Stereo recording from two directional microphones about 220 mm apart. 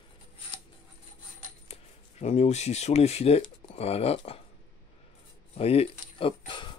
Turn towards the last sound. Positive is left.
turn(degrees=20)  # may be behind; listen again after turning